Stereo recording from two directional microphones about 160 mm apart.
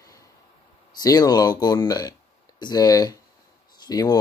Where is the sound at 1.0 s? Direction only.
25° left (ahead or behind).